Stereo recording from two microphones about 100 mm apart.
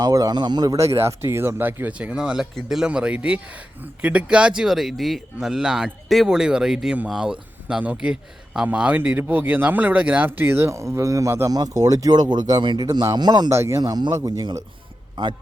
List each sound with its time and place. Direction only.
0.0 s a man's voice: 40° right (ahead or behind)
0.8 s speech: 90° right
1.0 s a man's voice: 25° right (ahead or behind); by 13.5 s 45° right (ahead or behind)
13.5 s a man's voice: 30° right (ahead or behind); by 15.4 s 50° right (ahead or behind)